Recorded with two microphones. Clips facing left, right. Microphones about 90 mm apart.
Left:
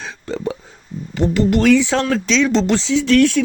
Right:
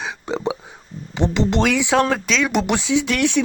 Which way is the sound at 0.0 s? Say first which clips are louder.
Even; 15° right (ahead or behind).